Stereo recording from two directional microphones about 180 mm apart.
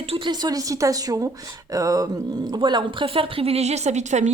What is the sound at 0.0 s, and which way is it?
A woman's voice, 30° right (ahead or behind).